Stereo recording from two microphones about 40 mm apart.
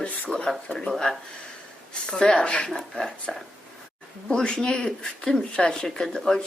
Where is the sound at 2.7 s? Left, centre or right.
Centre.